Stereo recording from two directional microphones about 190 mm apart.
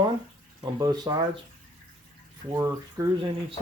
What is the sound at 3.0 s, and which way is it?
Speech, 15° right (ahead or behind).